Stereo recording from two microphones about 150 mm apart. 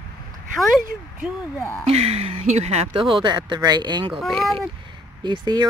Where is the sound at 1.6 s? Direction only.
15° left (ahead or behind).